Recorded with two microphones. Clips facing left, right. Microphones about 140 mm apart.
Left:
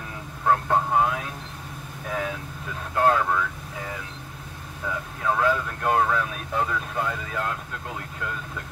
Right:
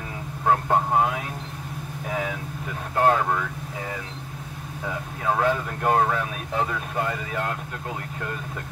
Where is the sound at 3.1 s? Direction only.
20° right (ahead or behind).